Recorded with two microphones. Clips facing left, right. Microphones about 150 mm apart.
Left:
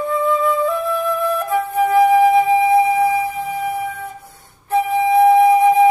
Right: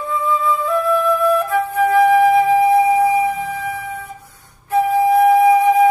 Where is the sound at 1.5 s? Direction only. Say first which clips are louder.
Even; 20° left (ahead or behind).